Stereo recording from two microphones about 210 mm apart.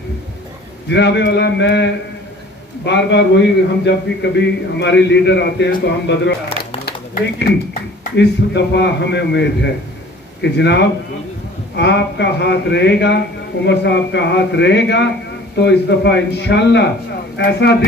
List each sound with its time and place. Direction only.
0.8 s speech: 55° left (ahead or behind)
6.9 s a sound: 50° left (ahead or behind)
8.0 s a man's voice: 55° left (ahead or behind)